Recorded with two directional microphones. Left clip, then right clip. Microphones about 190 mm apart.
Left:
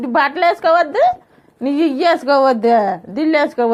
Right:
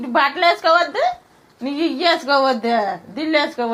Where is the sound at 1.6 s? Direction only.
70° left (ahead or behind).